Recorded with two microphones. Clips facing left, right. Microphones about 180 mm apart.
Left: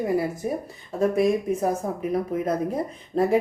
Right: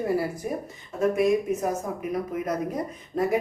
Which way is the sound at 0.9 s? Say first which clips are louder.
Left 1 dB; 35° left (ahead or behind).